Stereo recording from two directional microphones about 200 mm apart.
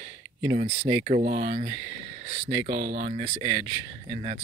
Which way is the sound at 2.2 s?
30° right (ahead or behind).